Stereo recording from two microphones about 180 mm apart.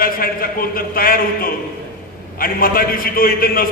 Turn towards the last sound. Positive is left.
turn(degrees=55)  # may be behind; listen again after turning